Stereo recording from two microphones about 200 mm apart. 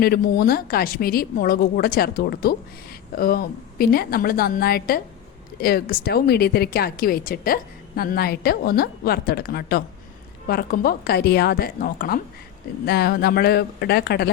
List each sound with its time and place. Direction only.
0.0 s speech: 50° left (ahead or behind)